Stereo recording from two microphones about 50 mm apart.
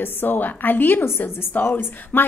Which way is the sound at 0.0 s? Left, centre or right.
Left.